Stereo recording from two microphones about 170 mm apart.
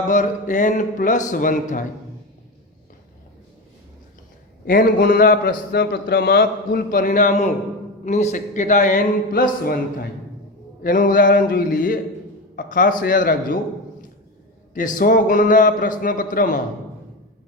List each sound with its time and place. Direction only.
0.1 s a man's voice: 50° left (ahead or behind)
4.6 s a man's voice: 55° left (ahead or behind)
10.8 s a man's voice: 55° left (ahead or behind)
14.7 s a man's voice: 50° left (ahead or behind)